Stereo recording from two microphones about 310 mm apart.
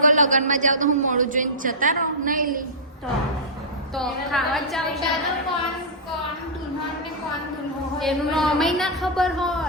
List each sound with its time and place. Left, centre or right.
0.0 s a man's voice: right
3.9 s a woman's voice: centre
7.9 s a woman's voice: centre